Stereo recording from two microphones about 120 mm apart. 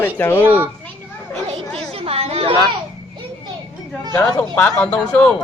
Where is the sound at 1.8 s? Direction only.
55° right (ahead or behind).